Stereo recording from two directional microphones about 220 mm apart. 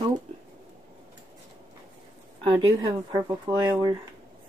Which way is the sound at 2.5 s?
20° right (ahead or behind).